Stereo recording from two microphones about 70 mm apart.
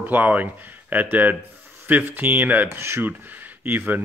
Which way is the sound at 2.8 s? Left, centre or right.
Right.